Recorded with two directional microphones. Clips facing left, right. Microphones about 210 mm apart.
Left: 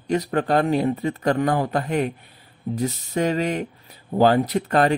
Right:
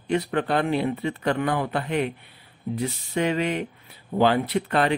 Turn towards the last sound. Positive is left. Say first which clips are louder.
# left 3 dB
turn(degrees=45)  # may be behind; listen again after turning